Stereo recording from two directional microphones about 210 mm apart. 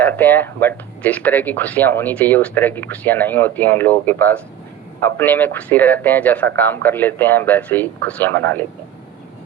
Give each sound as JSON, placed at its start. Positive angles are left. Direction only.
{"t": 0.0, "sound": "speech", "side_deg": 10}